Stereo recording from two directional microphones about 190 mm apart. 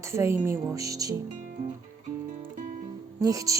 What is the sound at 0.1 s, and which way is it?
Speech, 15° right (ahead or behind).